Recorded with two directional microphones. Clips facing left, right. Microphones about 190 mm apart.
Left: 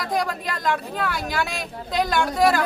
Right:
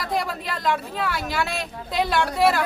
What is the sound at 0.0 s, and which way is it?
Speech, centre (ahead or behind).